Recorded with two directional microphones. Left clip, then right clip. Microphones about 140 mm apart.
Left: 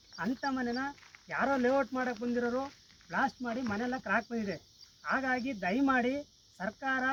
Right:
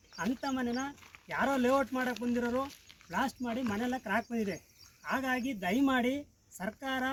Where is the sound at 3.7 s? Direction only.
20° right (ahead or behind).